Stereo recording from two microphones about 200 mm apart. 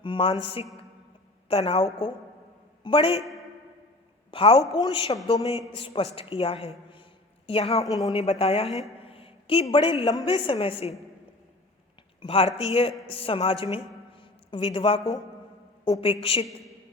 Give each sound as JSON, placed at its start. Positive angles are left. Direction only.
{"t": 0.0, "sound": "a man's voice", "side_deg": 25}
{"t": 1.5, "sound": "a woman's voice", "side_deg": 30}
{"t": 4.3, "sound": "a woman's voice", "side_deg": 25}
{"t": 9.0, "sound": "a sound", "side_deg": 30}
{"t": 9.7, "sound": "a woman's voice", "side_deg": 25}
{"t": 12.2, "sound": "a woman's voice", "side_deg": 30}